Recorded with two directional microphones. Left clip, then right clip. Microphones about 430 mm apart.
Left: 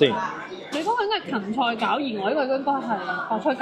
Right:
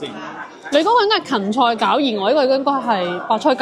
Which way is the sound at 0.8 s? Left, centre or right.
Right.